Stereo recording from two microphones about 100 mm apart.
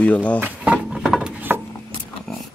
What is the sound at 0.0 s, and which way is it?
Speech, 15° left (ahead or behind).